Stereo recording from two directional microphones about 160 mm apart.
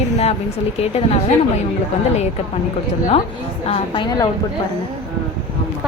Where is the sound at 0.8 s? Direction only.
40° left (ahead or behind).